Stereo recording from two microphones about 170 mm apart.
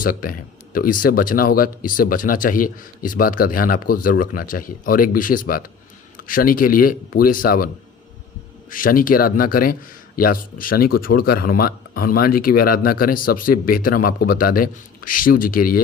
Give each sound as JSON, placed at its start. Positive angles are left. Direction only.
{"t": 0.0, "sound": "speech", "side_deg": 55}
{"t": 8.7, "sound": "speech", "side_deg": 55}